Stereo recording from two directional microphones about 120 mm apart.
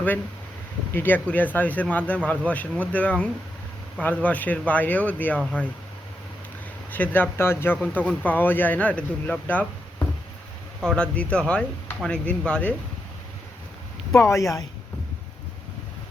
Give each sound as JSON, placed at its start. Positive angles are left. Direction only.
{"t": 0.9, "sound": "speech", "side_deg": 15}
{"t": 6.9, "sound": "speech", "side_deg": 15}
{"t": 10.8, "sound": "speech", "side_deg": 5}
{"t": 14.1, "sound": "speech", "side_deg": 25}